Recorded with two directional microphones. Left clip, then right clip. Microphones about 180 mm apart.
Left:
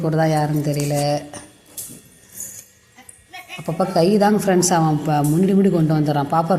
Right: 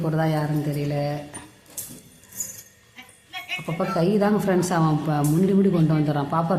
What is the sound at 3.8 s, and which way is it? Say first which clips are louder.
A man's voice: left 6 dB; 20° left (ahead or behind).